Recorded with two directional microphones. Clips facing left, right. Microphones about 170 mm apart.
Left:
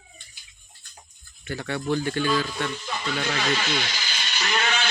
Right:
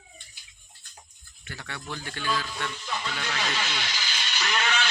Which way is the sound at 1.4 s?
35° left (ahead or behind).